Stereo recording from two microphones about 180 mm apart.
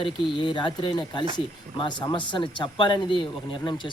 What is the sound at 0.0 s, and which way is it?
Speech, 25° left (ahead or behind).